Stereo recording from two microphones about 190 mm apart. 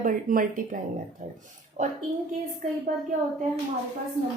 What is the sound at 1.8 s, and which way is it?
Speech, 40° right (ahead or behind).